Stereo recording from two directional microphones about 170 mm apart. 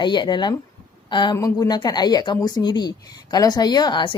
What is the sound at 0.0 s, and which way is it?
Speech, 25° left (ahead or behind).